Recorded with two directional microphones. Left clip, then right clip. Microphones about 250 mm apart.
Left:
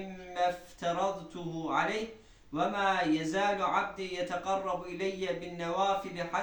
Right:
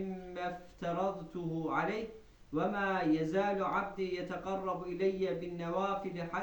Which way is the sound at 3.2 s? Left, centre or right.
Left.